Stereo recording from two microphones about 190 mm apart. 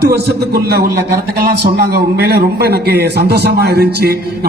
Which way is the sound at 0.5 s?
55° right (ahead or behind).